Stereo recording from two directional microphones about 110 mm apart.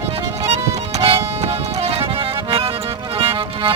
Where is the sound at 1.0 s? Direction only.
65° right (ahead or behind).